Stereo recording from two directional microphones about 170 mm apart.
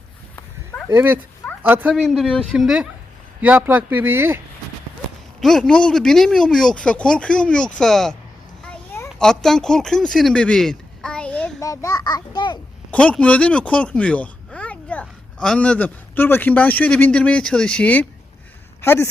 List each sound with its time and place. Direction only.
0.9 s speech: 15° right (ahead or behind)
2.0 s speech: 5° left (ahead or behind); by 4.4 s 15° right (ahead or behind)
5.4 s speech: centre (ahead or behind)
9.1 s speech: 5° left (ahead or behind)
11.6 s a child's voice: 20° left (ahead or behind)
12.9 s speech: 5° left (ahead or behind)